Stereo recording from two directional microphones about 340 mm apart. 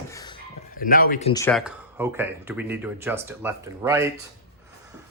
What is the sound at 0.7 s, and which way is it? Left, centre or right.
Speech, left.